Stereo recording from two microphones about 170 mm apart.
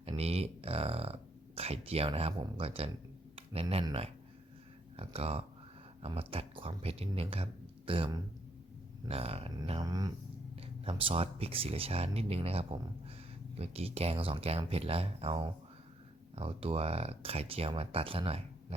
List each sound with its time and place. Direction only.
0.2 s a sound: 35° right (ahead or behind)
1.5 s speech: 35° right (ahead or behind)
4.9 s speech: 35° right (ahead or behind)
9.8 s speech: 25° right (ahead or behind)
10.6 s speech: 35° right (ahead or behind)